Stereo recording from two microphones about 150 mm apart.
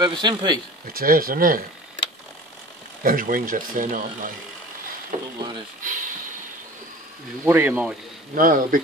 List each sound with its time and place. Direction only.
0.0 s speech: 30° right (ahead or behind)
0.9 s speech: 70° right (ahead or behind)
3.0 s speech: 70° right (ahead or behind)
7.4 s speech: 15° right (ahead or behind)
8.4 s speech: 70° right (ahead or behind)